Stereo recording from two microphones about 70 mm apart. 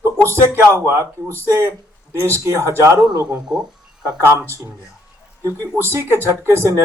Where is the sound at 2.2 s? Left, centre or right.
Right.